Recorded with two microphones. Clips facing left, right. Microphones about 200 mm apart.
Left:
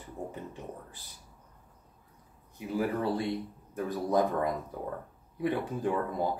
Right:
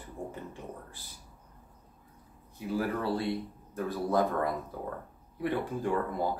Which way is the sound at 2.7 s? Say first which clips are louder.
Left 1 dB; 20° left (ahead or behind).